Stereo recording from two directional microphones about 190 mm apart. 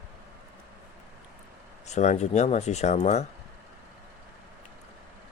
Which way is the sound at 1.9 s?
40° left (ahead or behind).